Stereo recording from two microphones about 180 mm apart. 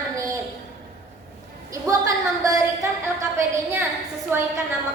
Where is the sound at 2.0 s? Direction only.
20° right (ahead or behind).